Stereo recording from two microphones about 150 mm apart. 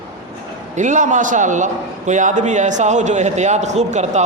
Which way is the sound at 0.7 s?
55° right (ahead or behind).